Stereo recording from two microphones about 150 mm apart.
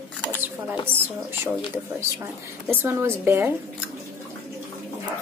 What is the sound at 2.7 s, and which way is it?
Speech, 15° right (ahead or behind).